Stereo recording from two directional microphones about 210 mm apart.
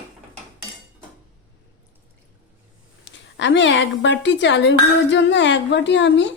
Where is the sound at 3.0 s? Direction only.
60° left (ahead or behind).